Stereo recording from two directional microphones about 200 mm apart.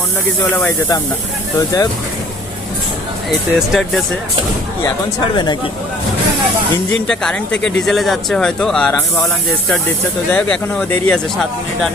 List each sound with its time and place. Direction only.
0.5 s speech: 10° left (ahead or behind)
3.2 s speech: centre (ahead or behind)
7.1 s speech: 5° left (ahead or behind)